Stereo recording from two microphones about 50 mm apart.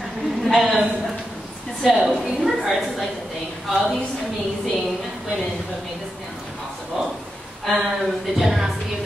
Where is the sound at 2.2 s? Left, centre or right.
Centre.